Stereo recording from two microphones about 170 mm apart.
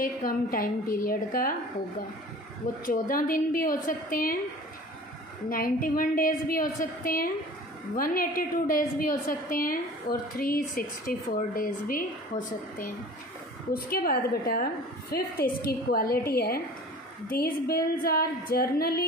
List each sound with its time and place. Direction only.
0.0 s a woman's voice: 55° left (ahead or behind)
2.8 s a woman's voice: 55° left (ahead or behind)
5.5 s a woman's voice: 55° left (ahead or behind)